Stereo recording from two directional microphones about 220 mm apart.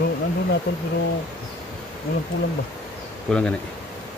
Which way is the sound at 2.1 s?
45° left (ahead or behind).